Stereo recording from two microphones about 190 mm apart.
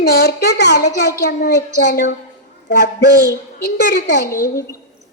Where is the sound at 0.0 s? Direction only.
60° left (ahead or behind).